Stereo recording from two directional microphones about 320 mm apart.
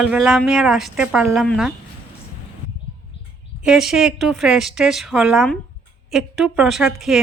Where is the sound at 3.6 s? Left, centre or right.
Centre.